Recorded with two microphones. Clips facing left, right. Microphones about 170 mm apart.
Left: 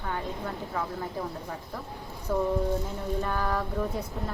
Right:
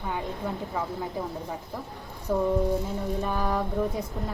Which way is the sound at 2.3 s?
10° right (ahead or behind).